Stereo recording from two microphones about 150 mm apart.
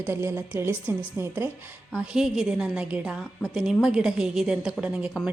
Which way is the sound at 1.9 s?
5° right (ahead or behind).